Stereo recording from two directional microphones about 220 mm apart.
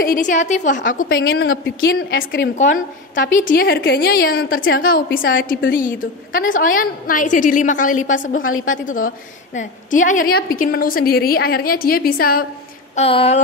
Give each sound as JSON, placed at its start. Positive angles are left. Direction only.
{"t": 0.0, "sound": "a woman's voice", "side_deg": 40}
{"t": 1.2, "sound": "a woman's voice", "side_deg": 45}
{"t": 2.5, "sound": "a woman's voice", "side_deg": 35}
{"t": 8.4, "sound": "a woman's voice", "side_deg": 65}
{"t": 8.8, "sound": "a woman's voice", "side_deg": 35}
{"t": 12.9, "sound": "speech", "side_deg": 25}